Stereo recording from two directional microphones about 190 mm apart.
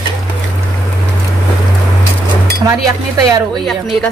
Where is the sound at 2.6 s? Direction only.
15° right (ahead or behind).